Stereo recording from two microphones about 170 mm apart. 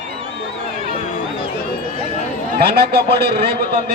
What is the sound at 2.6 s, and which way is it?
Speech, 65° right (ahead or behind).